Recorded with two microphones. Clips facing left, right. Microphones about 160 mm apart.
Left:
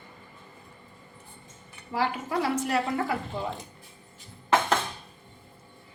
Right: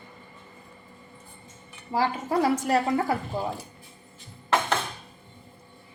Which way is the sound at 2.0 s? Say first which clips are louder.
Right 3 dB; 40° right (ahead or behind).